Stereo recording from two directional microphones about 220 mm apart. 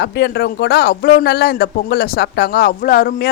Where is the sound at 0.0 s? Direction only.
50° left (ahead or behind).